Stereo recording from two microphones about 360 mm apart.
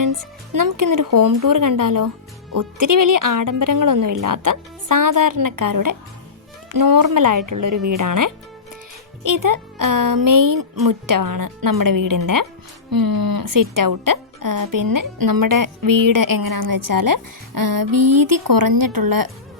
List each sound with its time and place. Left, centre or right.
0.0 s a woman's voice: right